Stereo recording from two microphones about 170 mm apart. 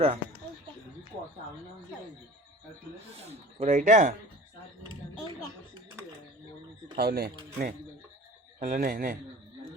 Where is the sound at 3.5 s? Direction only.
45° right (ahead or behind).